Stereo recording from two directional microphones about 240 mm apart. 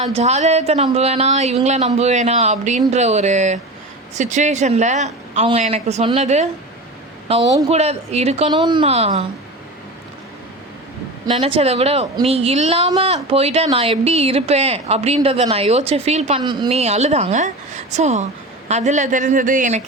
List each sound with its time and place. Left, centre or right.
0.1 s a woman's voice: right
11.3 s a woman's voice: right